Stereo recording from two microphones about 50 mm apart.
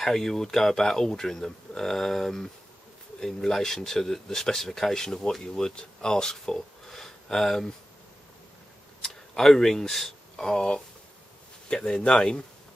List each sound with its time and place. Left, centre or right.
0.0 s speech: centre
9.0 s speech: centre